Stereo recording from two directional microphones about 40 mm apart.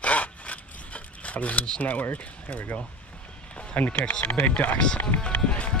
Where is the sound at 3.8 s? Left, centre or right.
Left.